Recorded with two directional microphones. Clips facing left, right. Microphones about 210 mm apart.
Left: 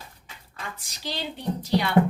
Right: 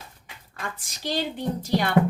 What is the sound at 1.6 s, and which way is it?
Speech, 50° right (ahead or behind).